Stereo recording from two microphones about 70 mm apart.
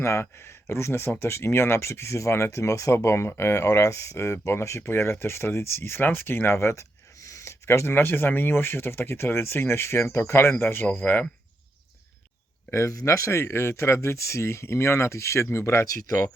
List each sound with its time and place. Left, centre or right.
0.0 s speech: left
12.7 s speech: left